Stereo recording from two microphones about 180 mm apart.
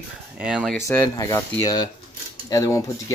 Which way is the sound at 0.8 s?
20° left (ahead or behind).